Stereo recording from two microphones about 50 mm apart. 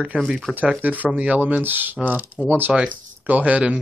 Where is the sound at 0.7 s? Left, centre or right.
Right.